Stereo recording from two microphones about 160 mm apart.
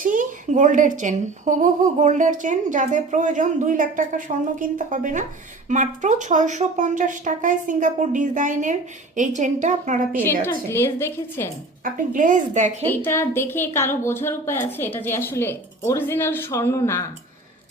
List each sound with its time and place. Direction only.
0.0 s speech: 55° right (ahead or behind)
10.7 s speech: 15° left (ahead or behind)
11.8 s speech: 55° right (ahead or behind)
12.8 s speech: 10° left (ahead or behind)